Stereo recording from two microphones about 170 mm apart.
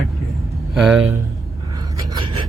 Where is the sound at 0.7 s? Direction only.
5° right (ahead or behind).